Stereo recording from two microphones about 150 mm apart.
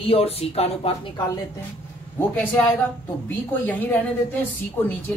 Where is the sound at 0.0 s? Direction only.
40° left (ahead or behind).